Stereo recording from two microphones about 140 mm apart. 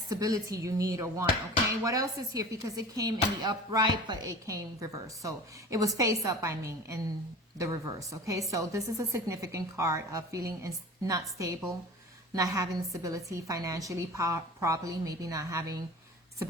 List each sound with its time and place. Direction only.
0.1 s a woman's voice: 25° right (ahead or behind)